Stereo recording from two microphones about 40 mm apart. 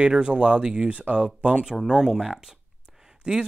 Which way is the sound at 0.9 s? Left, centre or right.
Right.